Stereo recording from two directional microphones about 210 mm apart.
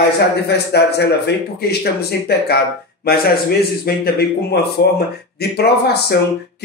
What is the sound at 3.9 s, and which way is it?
Speech, 45° left (ahead or behind).